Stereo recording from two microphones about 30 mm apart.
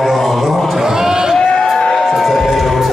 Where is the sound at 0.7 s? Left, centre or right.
Centre.